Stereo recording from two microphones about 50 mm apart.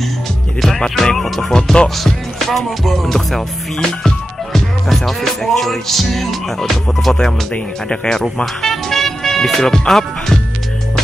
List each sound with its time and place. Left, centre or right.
0.6 s music: centre
1.5 s music: centre
2.0 s music: centre
7.5 s speech: centre